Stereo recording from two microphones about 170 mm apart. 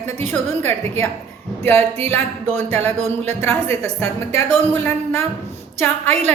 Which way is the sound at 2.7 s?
40° right (ahead or behind).